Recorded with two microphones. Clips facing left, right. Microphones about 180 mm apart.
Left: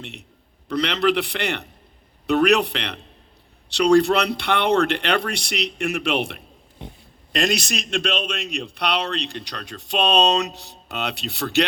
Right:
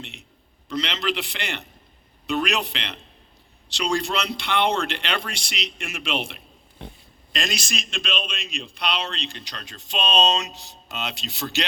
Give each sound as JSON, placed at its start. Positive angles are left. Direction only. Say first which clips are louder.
{"t": 0.7, "sound": "a man's voice", "louder": "left 7 dB", "side_deg": 65}